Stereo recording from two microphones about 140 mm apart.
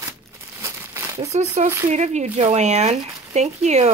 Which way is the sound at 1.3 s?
55° right (ahead or behind).